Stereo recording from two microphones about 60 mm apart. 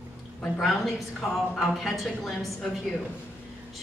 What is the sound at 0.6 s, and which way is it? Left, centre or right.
A woman's voice, centre.